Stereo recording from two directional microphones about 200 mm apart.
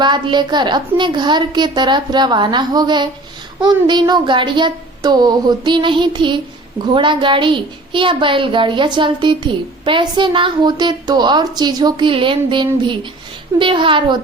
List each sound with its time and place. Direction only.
0.0 s a woman's voice: 20° right (ahead or behind)